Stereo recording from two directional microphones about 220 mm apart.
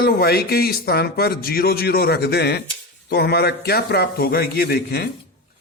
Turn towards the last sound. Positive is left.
turn(degrees=45)  # may be behind; listen again after turning